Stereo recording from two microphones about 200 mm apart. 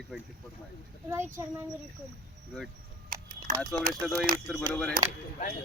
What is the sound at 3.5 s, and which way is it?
Speech, 40° right (ahead or behind).